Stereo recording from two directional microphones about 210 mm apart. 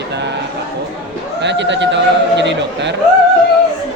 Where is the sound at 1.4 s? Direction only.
55° right (ahead or behind).